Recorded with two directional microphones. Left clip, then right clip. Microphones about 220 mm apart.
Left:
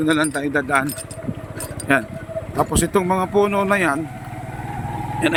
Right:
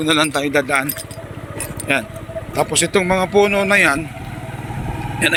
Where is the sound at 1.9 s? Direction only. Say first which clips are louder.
Left 1 dB; 20° left (ahead or behind).